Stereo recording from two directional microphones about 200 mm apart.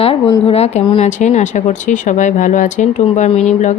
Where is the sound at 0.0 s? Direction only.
30° left (ahead or behind).